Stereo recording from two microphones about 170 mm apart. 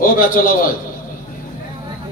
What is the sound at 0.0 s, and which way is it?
Speech, 55° left (ahead or behind).